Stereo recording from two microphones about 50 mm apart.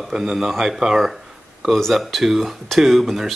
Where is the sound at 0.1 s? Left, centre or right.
Centre.